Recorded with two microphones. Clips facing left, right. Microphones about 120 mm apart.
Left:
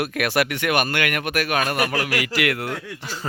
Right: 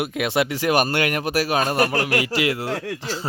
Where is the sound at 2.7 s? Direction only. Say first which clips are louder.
Right 5 dB; 80° right.